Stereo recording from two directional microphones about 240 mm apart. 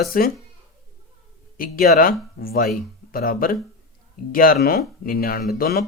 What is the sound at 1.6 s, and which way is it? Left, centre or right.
Speech, left.